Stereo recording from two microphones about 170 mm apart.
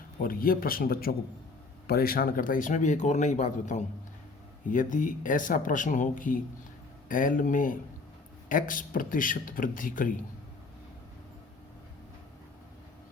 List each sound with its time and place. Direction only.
0.2 s a man's voice: 60° left (ahead or behind)